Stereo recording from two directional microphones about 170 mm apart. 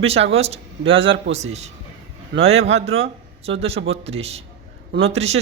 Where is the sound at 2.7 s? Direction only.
35° right (ahead or behind).